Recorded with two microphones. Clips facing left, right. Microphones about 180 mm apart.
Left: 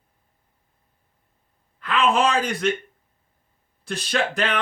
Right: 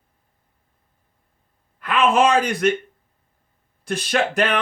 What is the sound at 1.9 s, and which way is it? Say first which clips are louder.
Speech: right 3 dB; 15° right (ahead or behind).